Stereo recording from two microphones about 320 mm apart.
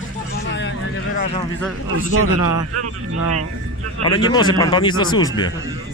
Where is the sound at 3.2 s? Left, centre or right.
Right.